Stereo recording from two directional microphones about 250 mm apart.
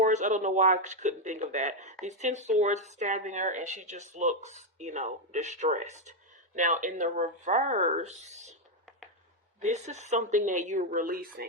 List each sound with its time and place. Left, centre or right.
0.0 s speech: right
9.6 s speech: right